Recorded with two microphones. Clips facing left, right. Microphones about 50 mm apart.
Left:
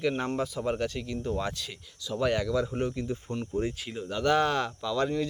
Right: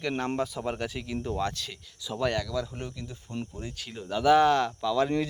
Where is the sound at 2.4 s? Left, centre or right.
Left.